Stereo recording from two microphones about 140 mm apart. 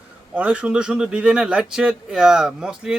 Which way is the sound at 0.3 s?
10° right (ahead or behind).